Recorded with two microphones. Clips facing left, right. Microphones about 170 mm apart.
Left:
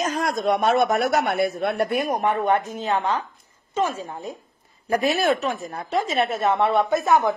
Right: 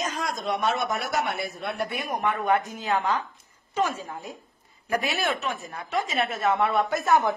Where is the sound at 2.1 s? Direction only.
40° left (ahead or behind).